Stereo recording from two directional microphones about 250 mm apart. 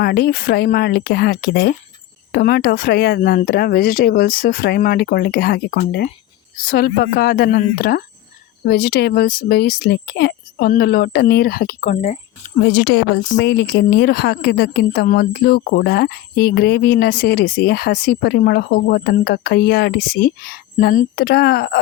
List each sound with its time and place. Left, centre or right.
0.0 s a woman's voice: left